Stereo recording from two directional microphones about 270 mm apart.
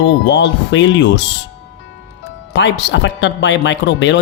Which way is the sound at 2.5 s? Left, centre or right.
Left.